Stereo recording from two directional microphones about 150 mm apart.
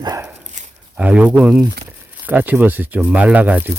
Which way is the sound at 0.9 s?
10° right (ahead or behind).